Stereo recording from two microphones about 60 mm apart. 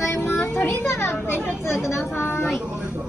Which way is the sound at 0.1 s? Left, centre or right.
Left.